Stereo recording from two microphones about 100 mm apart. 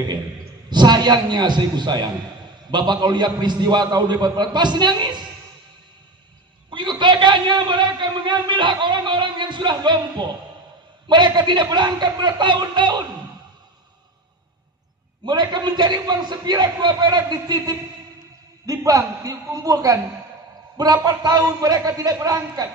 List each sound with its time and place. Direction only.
0.7 s a man's voice: 45° right (ahead or behind)
6.7 s a sound: 50° right (ahead or behind)
11.1 s a man's voice: 50° right (ahead or behind)
15.2 s a man's voice: 45° right (ahead or behind)
21.0 s a man's voice: 40° right (ahead or behind)